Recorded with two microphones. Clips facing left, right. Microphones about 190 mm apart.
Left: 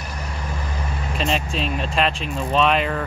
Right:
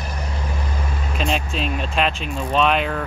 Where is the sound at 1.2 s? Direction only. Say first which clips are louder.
Even; centre (ahead or behind).